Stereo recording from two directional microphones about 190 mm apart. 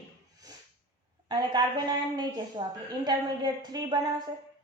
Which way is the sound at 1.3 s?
20° right (ahead or behind).